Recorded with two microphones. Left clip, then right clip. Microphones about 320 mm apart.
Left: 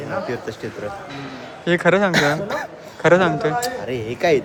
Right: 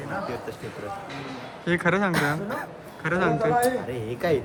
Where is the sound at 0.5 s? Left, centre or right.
Left.